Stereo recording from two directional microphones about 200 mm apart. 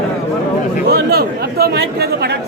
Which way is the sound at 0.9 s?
50° right (ahead or behind).